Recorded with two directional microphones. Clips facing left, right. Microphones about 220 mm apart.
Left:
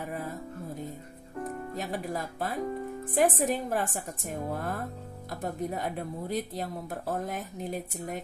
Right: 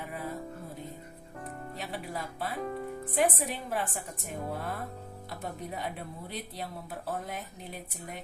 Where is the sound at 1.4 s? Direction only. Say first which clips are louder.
Left 6 dB; 45° left (ahead or behind).